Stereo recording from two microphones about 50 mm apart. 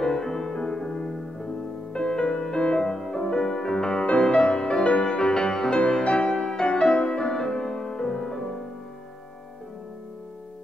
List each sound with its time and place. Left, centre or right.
0.0 s music: centre